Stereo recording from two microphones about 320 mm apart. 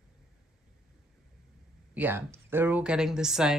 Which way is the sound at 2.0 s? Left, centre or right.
Centre.